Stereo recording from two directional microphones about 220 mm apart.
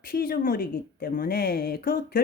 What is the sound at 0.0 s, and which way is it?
Speech, 45° left (ahead or behind).